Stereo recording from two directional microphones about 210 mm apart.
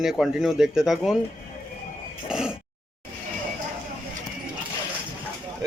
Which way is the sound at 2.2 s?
5° right (ahead or behind).